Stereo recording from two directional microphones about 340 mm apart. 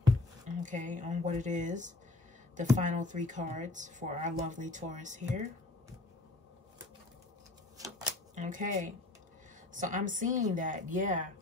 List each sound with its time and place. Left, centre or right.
0.5 s speech: right
7.7 s shuffling cards: centre
8.4 s speech: right